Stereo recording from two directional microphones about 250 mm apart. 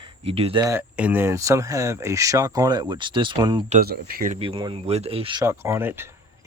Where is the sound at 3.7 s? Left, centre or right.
Right.